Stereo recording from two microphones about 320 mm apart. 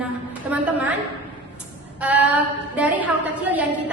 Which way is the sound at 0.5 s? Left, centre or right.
Centre.